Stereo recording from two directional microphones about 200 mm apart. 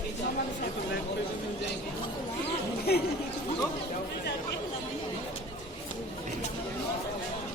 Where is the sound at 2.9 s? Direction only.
55° left (ahead or behind).